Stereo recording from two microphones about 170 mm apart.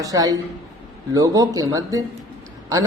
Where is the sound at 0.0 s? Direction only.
20° right (ahead or behind).